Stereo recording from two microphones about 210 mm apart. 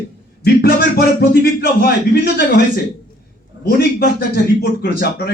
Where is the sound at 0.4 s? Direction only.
45° left (ahead or behind).